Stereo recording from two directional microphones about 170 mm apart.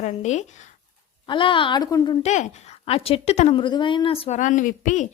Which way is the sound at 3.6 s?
30° left (ahead or behind).